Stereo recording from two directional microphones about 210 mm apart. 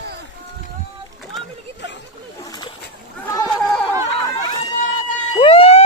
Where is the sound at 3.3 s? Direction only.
15° left (ahead or behind).